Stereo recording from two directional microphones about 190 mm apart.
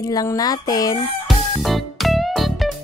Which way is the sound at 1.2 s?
Centre (ahead or behind).